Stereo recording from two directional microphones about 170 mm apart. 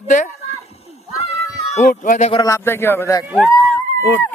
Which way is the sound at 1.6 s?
40° left (ahead or behind).